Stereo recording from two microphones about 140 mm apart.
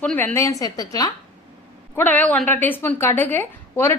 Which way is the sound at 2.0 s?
10° left (ahead or behind).